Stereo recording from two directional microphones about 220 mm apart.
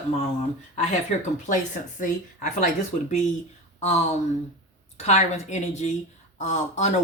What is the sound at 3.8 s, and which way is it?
Speech, 30° left (ahead or behind).